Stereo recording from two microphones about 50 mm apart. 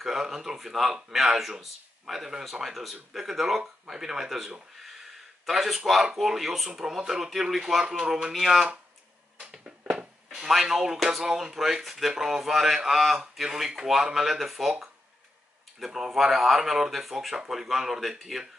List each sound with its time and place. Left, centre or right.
0.0 s speech: centre
4.8 s gasp: centre
6.1 s speech: centre
8.3 s speech: centre
9.4 s music: centre
10.5 s speech: centre